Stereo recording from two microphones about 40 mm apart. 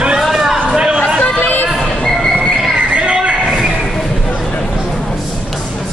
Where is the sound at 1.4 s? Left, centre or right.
Left.